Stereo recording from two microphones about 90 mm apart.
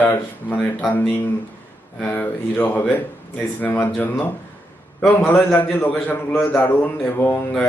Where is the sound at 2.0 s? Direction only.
20° left (ahead or behind).